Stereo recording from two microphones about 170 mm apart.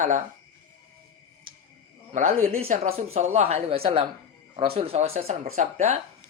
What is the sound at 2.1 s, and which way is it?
Speech, 40° right (ahead or behind).